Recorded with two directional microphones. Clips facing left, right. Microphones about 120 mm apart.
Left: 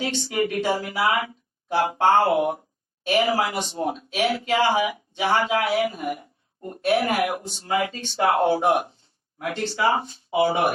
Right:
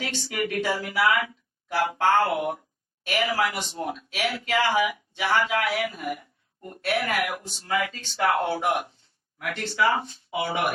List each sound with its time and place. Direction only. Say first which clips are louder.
0.0 s speech: left 5 dB; 30° left (ahead or behind)